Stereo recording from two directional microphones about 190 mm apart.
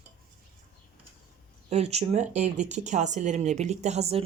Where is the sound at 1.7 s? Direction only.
35° right (ahead or behind).